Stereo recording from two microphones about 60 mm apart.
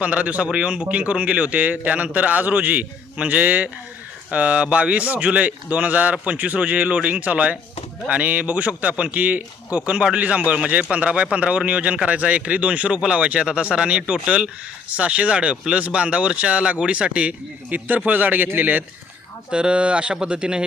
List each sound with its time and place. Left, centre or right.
0.0 s speech: centre
19.5 s speech: centre